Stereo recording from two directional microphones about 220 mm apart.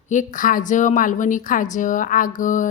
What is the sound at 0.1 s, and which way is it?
A woman's voice, 35° left (ahead or behind).